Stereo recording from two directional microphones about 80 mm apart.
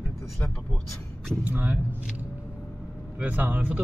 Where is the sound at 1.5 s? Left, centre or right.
Right.